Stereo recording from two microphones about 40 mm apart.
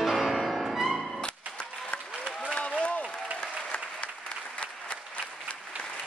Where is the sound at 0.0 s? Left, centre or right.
Centre.